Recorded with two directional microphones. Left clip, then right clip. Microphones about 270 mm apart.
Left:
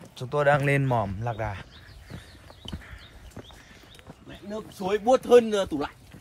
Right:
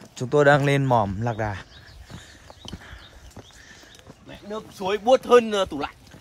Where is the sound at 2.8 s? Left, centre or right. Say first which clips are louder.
Right 3 dB; centre.